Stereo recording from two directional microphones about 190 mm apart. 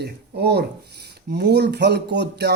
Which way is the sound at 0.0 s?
60° right (ahead or behind).